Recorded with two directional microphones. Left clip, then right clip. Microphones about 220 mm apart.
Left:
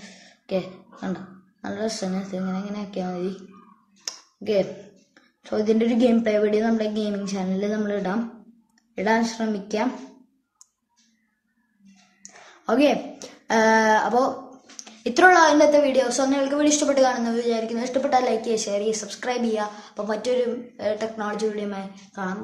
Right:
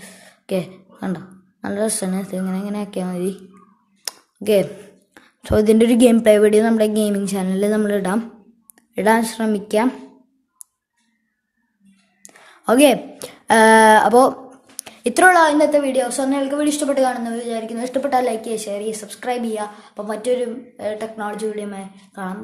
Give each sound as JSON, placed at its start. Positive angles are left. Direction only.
{"t": 0.0, "sound": "speech", "side_deg": -50}
{"t": 4.0, "sound": "a sound", "side_deg": -45}
{"t": 5.1, "sound": "a woman's voice", "side_deg": -50}
{"t": 12.6, "sound": "speech", "side_deg": -45}
{"t": 14.9, "sound": "a woman's voice", "side_deg": -30}